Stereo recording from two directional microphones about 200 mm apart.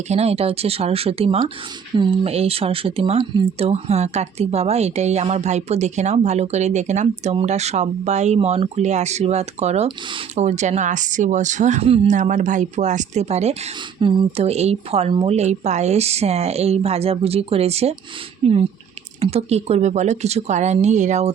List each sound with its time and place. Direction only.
0.1 s speech: 30° right (ahead or behind)